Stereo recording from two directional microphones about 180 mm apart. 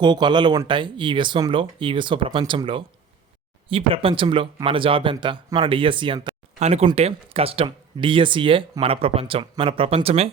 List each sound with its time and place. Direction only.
0.0 s speech: 25° right (ahead or behind)
6.6 s speech: 35° right (ahead or behind)